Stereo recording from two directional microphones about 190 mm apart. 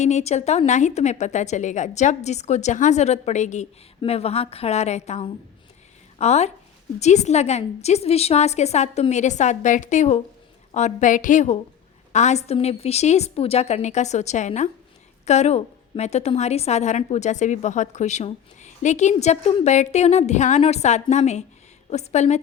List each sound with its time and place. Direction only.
0.0 s a woman's voice: 35° left (ahead or behind)